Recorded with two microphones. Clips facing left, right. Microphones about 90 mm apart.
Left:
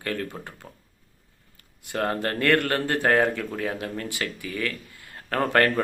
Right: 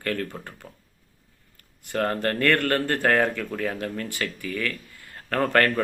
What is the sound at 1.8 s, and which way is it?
Speech, 15° left (ahead or behind).